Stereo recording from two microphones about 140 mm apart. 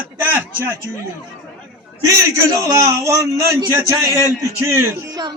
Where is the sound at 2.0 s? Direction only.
25° right (ahead or behind).